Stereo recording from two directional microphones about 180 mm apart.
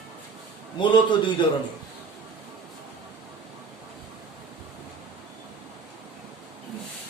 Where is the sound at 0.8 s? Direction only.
25° left (ahead or behind).